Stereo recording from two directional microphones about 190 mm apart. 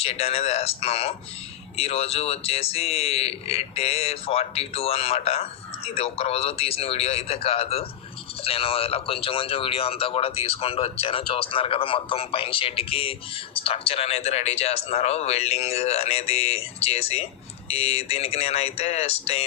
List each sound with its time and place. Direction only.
0.0 s speech: 30° left (ahead or behind)